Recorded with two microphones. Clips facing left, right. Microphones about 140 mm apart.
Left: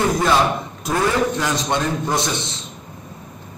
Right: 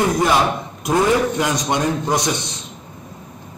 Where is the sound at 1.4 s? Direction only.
15° right (ahead or behind).